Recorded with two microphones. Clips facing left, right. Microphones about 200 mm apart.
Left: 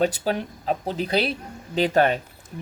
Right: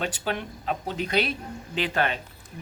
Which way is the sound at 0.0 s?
35° left (ahead or behind).